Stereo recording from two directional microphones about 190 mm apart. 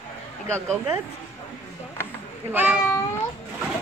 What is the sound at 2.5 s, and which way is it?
Speech, 10° right (ahead or behind).